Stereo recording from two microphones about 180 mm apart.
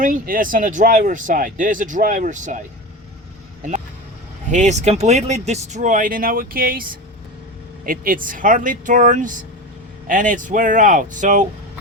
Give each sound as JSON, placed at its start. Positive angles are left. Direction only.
{"t": 0.0, "sound": "speech", "side_deg": -50}
{"t": 4.4, "sound": "speech", "side_deg": -40}